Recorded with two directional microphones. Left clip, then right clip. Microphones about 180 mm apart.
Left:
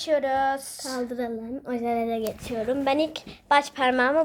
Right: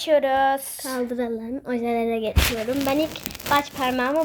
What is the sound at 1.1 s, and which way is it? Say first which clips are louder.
Speech: right 4 dB; 55° right (ahead or behind).